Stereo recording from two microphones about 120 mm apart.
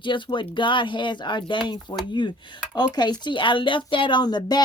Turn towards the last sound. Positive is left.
turn(degrees=35)  # may be behind; listen again after turning